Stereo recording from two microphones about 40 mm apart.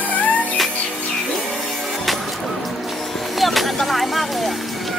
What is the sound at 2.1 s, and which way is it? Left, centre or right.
Music, centre.